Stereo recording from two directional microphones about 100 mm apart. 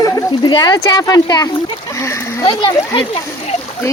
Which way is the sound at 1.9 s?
30° left (ahead or behind).